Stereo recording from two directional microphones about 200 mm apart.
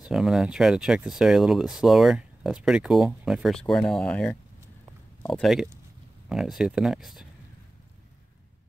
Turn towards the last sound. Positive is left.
turn(degrees=0)  # may be behind; listen again after turning